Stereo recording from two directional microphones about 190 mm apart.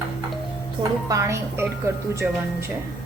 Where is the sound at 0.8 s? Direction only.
20° right (ahead or behind).